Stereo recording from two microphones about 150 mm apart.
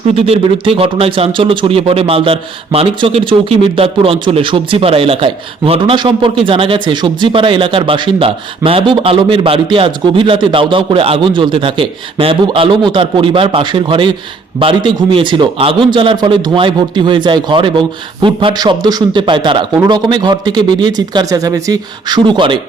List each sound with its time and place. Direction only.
0.2 s speech: 40° right (ahead or behind)